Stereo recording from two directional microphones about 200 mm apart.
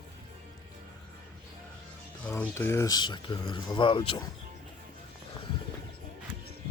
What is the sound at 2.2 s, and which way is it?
Speech, 10° left (ahead or behind).